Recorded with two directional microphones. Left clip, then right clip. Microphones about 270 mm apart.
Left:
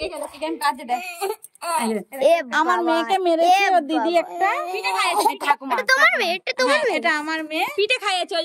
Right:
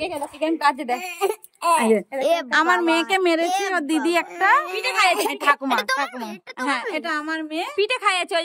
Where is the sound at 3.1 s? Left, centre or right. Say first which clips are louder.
Left 1 dB; right.